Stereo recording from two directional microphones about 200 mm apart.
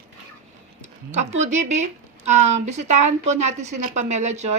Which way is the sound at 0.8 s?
35° right (ahead or behind).